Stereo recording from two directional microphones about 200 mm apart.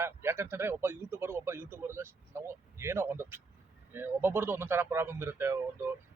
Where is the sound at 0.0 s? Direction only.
10° right (ahead or behind).